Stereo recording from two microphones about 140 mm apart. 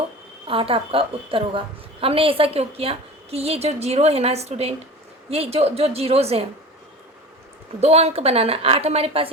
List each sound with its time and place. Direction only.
0.4 s a woman's voice: 40° right (ahead or behind)
7.8 s a woman's voice: 50° right (ahead or behind)